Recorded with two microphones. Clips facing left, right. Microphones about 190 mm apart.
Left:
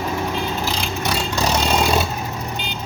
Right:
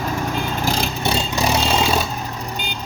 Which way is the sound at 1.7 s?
Centre (ahead or behind).